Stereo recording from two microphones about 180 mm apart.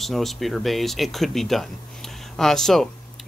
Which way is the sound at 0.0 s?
Centre (ahead or behind).